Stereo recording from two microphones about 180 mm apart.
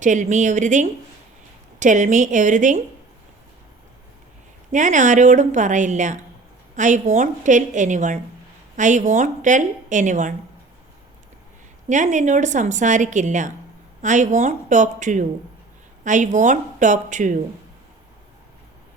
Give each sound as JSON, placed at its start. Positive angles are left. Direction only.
{"t": 0.0, "sound": "a woman's voice", "side_deg": -45}
{"t": 4.7, "sound": "a woman's voice", "side_deg": -45}
{"t": 11.9, "sound": "a woman's voice", "side_deg": -40}